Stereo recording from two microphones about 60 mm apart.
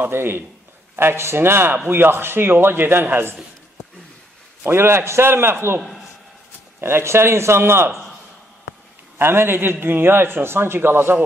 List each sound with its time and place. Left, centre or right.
0.0 s a man's voice: right
4.6 s a man's voice: right
5.8 s a man's voice: centre
6.8 s a man's voice: right
9.2 s a man's voice: right